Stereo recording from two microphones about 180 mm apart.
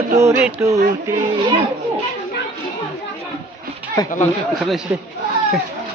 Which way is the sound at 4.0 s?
20° left (ahead or behind).